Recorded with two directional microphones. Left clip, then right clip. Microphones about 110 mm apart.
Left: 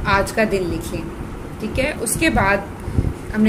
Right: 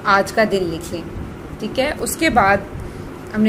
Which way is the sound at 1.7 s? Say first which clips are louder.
Right 2 dB; 30° right (ahead or behind).